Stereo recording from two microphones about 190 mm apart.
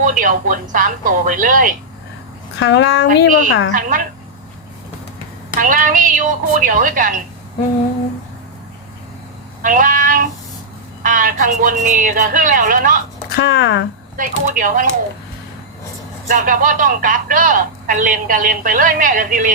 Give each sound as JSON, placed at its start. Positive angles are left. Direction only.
{"t": 0.0, "sound": "speech", "side_deg": -45}
{"t": 2.6, "sound": "speech", "side_deg": 65}
{"t": 3.7, "sound": "speech", "side_deg": -45}
{"t": 5.5, "sound": "speech", "side_deg": -45}
{"t": 9.6, "sound": "a sound", "side_deg": -45}
{"t": 11.0, "sound": "speech", "side_deg": -45}
{"t": 13.3, "sound": "speech", "side_deg": 60}
{"t": 14.2, "sound": "speech", "side_deg": -45}
{"t": 16.3, "sound": "speech", "side_deg": -45}